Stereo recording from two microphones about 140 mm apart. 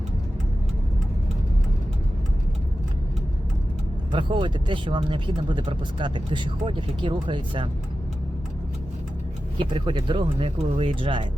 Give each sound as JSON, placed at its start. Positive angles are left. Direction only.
{"t": 4.1, "sound": "speech", "side_deg": -35}
{"t": 9.6, "sound": "speech", "side_deg": -35}